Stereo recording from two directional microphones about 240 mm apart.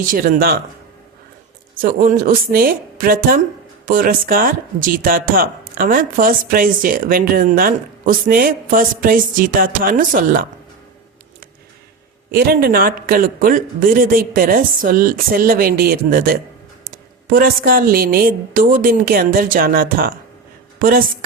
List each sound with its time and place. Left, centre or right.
0.1 s speech: right
1.8 s speech: right
12.3 s speech: right